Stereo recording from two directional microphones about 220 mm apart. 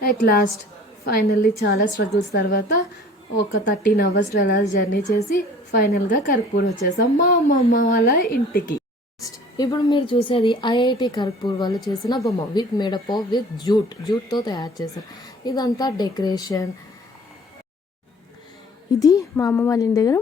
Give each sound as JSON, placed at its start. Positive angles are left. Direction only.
{"t": 0.3, "sound": "a woman's voice", "side_deg": 45}
{"t": 3.7, "sound": "a woman's voice", "side_deg": 45}
{"t": 9.2, "sound": "a woman's voice", "side_deg": 15}
{"t": 18.9, "sound": "a woman's voice", "side_deg": 15}